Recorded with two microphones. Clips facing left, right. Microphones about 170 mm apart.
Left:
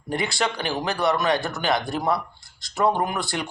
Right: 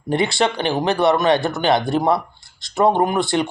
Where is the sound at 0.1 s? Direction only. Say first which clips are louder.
Right 7 dB; 25° right (ahead or behind).